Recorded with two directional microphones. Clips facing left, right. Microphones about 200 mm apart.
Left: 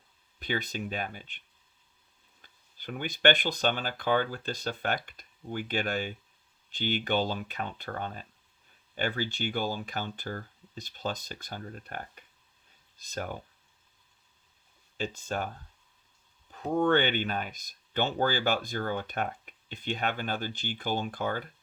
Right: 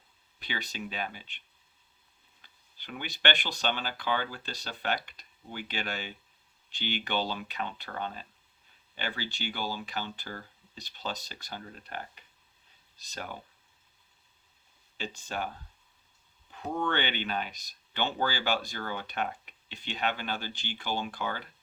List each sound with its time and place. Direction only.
0.3 s speech: 50° left (ahead or behind)
2.4 s speech: 45° left (ahead or behind)
14.9 s speech: 45° left (ahead or behind)
16.5 s speech: 40° left (ahead or behind)